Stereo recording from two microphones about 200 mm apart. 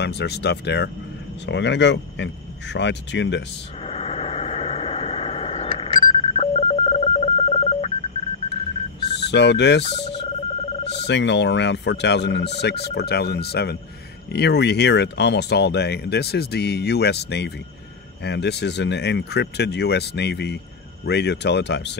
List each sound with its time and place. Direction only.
0.0 s speech: 55° left (ahead or behind)
3.8 s vehicle: 30° left (ahead or behind)
9.1 s speech: 60° left (ahead or behind)
10.9 s speech: 60° left (ahead or behind)